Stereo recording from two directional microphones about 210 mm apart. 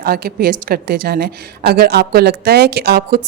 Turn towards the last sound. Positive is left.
turn(degrees=-45)  # may be behind; listen again after turning